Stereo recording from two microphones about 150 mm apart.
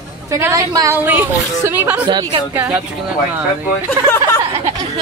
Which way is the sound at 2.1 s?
30° right (ahead or behind).